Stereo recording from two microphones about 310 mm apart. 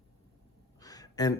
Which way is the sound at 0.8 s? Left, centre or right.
Centre.